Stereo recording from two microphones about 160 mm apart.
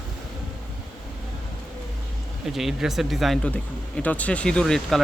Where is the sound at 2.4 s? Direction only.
Centre (ahead or behind).